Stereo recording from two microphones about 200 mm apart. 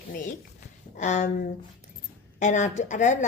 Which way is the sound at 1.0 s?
40° left (ahead or behind).